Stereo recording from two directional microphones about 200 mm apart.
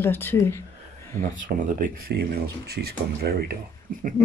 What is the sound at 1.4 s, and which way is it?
Speech, 40° right (ahead or behind).